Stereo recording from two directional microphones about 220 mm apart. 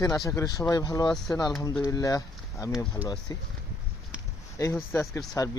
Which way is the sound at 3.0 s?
15° left (ahead or behind).